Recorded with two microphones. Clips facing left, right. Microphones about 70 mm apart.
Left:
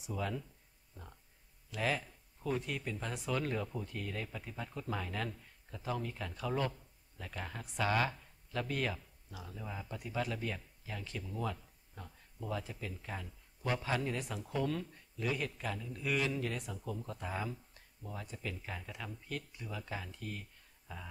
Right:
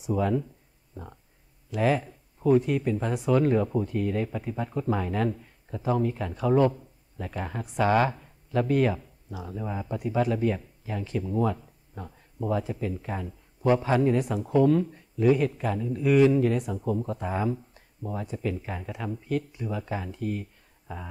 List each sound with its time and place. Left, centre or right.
0.1 s a man's voice: right
1.7 s a man's voice: right
9.4 s a man's voice: right
11.2 s a man's voice: right; by 16.7 s centre
16.9 s a man's voice: right